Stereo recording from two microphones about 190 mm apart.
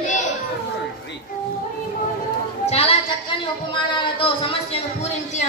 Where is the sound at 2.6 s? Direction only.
30° left (ahead or behind).